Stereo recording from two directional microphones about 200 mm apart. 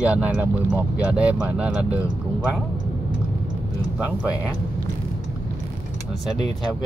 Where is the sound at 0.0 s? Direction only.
5° right (ahead or behind).